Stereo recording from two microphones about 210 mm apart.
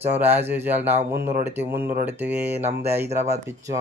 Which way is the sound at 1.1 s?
50° right (ahead or behind).